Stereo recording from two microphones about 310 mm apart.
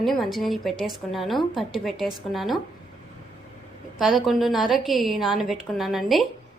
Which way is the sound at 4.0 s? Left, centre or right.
Centre.